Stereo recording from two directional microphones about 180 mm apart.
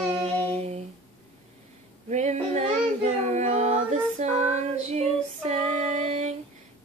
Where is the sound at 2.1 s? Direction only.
40° right (ahead or behind).